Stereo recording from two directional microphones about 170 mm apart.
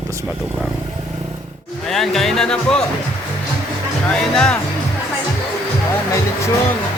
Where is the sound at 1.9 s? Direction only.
Centre (ahead or behind).